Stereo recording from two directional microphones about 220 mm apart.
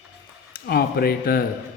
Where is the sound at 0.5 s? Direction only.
45° left (ahead or behind).